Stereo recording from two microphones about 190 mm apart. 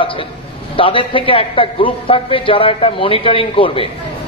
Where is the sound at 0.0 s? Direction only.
25° left (ahead or behind).